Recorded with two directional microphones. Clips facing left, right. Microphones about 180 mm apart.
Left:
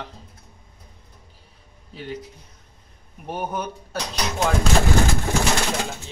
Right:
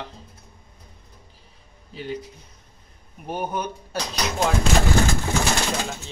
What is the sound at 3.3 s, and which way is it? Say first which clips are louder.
Speech: even; centre (ahead or behind).